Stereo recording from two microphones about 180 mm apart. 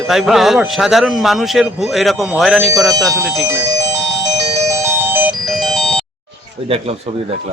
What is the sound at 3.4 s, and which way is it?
Speech, 15° right (ahead or behind).